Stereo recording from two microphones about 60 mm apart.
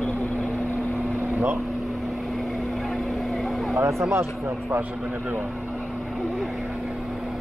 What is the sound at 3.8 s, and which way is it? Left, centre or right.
Speech, right.